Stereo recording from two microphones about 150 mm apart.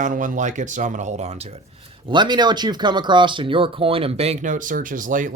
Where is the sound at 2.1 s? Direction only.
30° right (ahead or behind); by 5.3 s 60° right (ahead or behind).